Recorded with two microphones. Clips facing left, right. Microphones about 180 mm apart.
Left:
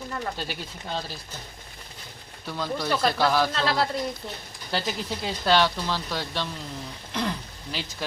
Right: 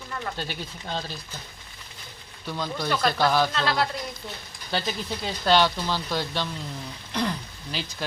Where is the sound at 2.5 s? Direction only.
5° left (ahead or behind).